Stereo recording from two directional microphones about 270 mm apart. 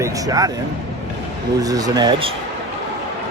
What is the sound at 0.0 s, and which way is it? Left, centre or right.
Speech, centre.